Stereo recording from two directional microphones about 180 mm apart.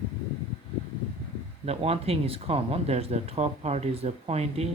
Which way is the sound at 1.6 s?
35° right (ahead or behind).